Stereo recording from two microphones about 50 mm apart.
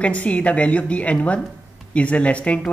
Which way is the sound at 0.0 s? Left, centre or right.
Left.